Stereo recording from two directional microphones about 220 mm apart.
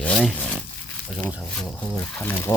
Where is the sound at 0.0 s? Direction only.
5° left (ahead or behind).